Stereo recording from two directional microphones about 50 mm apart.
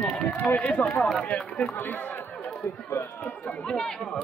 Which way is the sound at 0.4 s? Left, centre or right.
Left.